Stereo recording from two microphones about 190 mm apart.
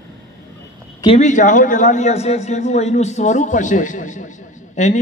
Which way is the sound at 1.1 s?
40° left (ahead or behind).